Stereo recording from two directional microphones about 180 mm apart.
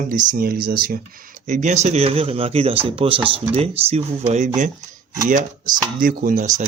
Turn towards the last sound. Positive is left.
turn(degrees=-40)  # may be behind; listen again after turning